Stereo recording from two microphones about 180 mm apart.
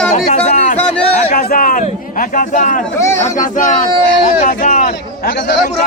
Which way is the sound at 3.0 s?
15° left (ahead or behind).